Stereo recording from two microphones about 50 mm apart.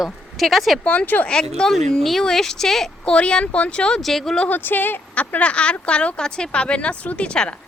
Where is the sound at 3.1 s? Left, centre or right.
Centre.